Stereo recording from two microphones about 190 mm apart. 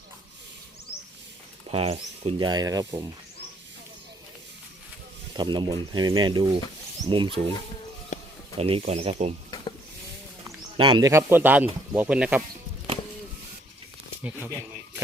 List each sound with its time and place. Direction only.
1.7 s speech: 30° right (ahead or behind)
5.4 s speech: 25° right (ahead or behind)
8.1 s a sound: 40° left (ahead or behind)
8.5 s speech: 30° right (ahead or behind)
10.8 s speech: 25° right (ahead or behind); by 12.4 s 5° right (ahead or behind)
14.3 s speech: 10° right (ahead or behind)